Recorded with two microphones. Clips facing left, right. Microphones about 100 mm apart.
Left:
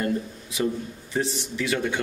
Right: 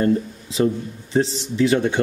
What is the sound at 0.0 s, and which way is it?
Speech, 30° right (ahead or behind).